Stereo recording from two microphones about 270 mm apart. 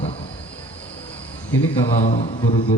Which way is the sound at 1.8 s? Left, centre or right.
Left.